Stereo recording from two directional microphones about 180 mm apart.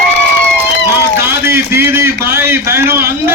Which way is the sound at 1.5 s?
15° right (ahead or behind).